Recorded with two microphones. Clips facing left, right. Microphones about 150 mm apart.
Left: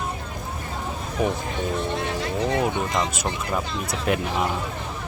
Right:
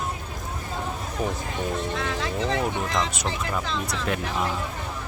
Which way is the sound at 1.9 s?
90° right.